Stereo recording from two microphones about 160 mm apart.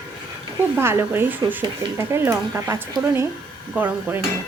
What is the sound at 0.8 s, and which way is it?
Speech, 15° right (ahead or behind).